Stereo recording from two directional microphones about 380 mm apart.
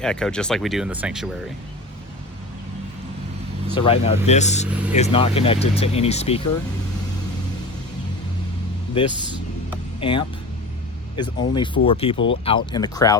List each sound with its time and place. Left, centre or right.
0.0 s speech: centre
3.8 s speech: centre
10.0 s speech: centre